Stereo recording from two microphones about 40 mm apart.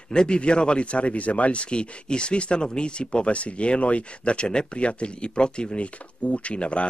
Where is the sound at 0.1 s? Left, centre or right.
Left.